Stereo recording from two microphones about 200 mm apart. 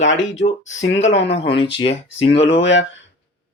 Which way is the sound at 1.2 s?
30° left (ahead or behind).